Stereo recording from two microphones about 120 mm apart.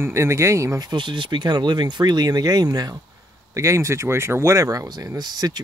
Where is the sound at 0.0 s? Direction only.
25° right (ahead or behind).